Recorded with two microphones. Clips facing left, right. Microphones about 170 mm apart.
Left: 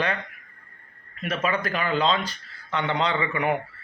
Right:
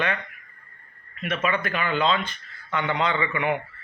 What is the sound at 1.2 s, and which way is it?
A man's voice, 35° left (ahead or behind).